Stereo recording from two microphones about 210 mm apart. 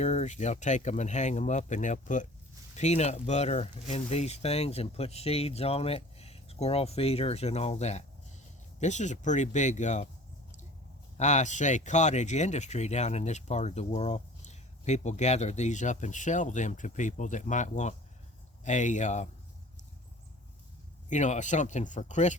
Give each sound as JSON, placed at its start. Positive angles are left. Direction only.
{"t": 0.0, "sound": "speech", "side_deg": 30}
{"t": 11.2, "sound": "speech", "side_deg": 35}
{"t": 21.1, "sound": "speech", "side_deg": 35}